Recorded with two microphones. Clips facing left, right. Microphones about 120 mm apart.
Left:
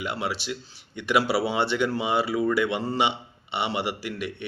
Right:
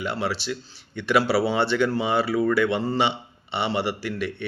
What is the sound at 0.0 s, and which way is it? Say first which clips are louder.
Speech: right 3 dB; 15° left (ahead or behind).